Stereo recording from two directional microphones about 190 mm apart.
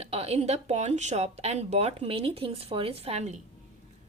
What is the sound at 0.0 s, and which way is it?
Speech, 35° right (ahead or behind).